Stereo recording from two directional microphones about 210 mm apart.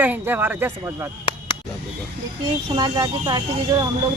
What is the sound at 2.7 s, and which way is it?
Speech, 20° right (ahead or behind).